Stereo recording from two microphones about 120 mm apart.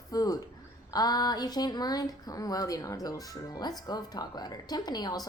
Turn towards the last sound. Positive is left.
turn(degrees=35)  # may be behind; listen again after turning